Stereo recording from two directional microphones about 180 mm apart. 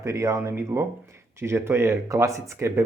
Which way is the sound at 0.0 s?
15° right (ahead or behind).